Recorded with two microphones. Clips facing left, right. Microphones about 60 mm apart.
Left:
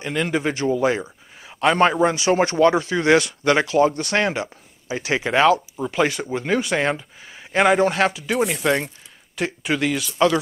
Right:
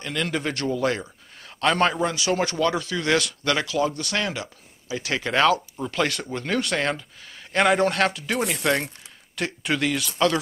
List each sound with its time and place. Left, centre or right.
0.0 s speech: centre; by 3.7 s left
3.7 s speech: left; by 10.4 s centre